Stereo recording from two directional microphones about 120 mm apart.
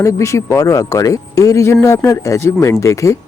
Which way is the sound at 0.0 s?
25° left (ahead or behind).